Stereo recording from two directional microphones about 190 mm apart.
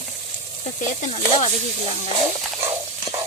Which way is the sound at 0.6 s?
35° left (ahead or behind).